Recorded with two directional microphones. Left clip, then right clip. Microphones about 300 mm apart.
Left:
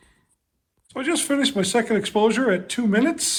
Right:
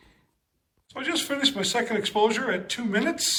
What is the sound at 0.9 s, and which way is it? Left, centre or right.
Speech, centre.